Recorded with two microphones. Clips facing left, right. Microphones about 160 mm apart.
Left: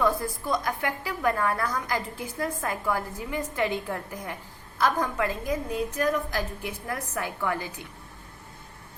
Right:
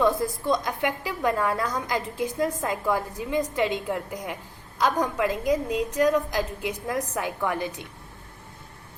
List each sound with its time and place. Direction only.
0.0 s a woman's voice: 20° right (ahead or behind)